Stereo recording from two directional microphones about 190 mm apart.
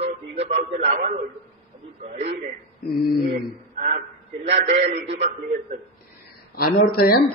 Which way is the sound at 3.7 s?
45° right (ahead or behind).